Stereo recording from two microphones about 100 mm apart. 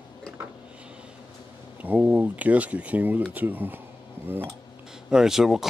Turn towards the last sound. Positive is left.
turn(degrees=-5)  # may be behind; listen again after turning